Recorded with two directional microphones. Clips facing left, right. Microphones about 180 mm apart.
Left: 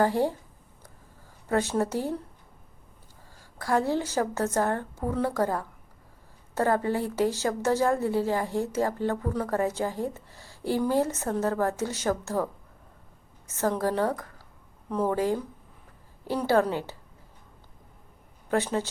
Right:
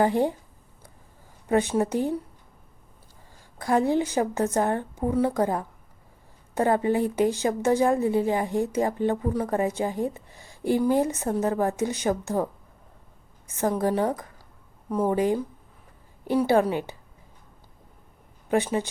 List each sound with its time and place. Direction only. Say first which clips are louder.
0.0 s speech: right 2 dB; 20° right (ahead or behind)
1.5 s a woman's voice: right 3 dB; 15° right (ahead or behind)
3.6 s a woman's voice: right 3 dB; 20° right (ahead or behind)
13.6 s a woman's voice: right 2 dB; 15° right (ahead or behind)
18.4 s speech: right 2 dB; 15° right (ahead or behind)